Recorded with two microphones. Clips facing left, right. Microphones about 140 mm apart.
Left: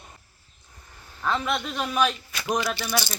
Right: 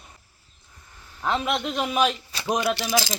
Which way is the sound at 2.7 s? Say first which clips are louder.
Right 4 dB; 90° right.